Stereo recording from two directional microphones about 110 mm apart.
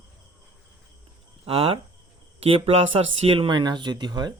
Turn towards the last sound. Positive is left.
turn(degrees=-40)  # may be behind; listen again after turning